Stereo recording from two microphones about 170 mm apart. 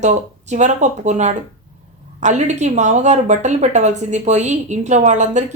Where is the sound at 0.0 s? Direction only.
45° right (ahead or behind).